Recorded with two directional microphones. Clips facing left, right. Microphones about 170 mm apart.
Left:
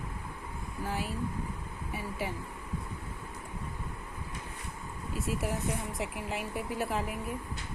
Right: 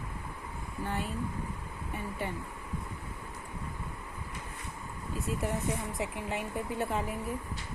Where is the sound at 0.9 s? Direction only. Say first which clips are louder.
Even; 5° left (ahead or behind).